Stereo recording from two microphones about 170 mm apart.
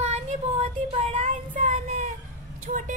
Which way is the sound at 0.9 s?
35° right (ahead or behind).